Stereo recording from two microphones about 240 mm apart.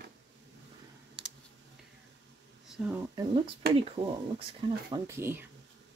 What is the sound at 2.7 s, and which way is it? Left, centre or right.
Speech, centre.